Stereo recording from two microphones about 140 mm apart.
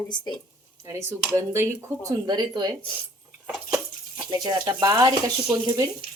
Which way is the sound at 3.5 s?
5° right (ahead or behind).